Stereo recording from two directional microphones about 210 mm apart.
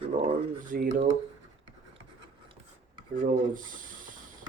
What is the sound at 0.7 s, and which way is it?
Speech, 40° right (ahead or behind).